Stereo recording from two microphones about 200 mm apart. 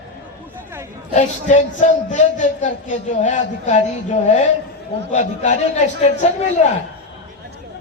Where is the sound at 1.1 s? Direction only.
35° left (ahead or behind).